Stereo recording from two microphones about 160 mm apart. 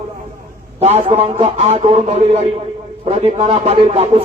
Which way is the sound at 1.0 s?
35° right (ahead or behind).